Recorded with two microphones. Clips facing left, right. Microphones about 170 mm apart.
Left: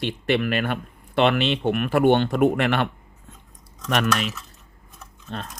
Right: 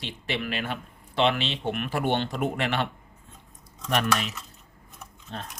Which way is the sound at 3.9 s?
80° left.